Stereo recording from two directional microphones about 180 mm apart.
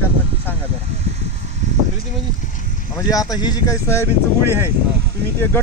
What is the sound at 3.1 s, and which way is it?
Speech, 20° left (ahead or behind).